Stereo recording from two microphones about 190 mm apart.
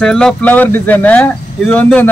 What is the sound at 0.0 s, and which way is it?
A man's voice, 5° left (ahead or behind).